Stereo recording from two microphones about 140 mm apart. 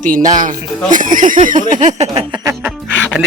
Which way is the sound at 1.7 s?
60° right (ahead or behind).